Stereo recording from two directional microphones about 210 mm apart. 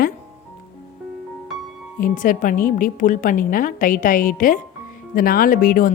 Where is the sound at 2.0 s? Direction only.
40° left (ahead or behind).